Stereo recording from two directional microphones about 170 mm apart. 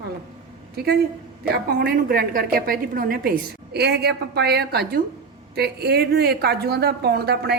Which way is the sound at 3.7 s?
75° right (ahead or behind).